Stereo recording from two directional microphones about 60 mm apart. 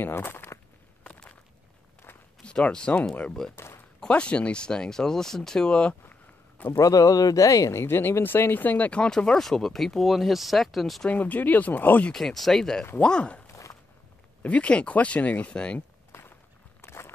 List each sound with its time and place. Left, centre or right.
0.0 s speech: left
1.0 s a sound: left
2.4 s speech: centre
3.5 s a sound: left
4.1 s speech: centre
6.8 s speech: left
7.7 s speech: left
9.0 s speech: centre
11.1 s speech: left
12.1 s speech: centre
14.4 s speech: left
16.1 s walk: left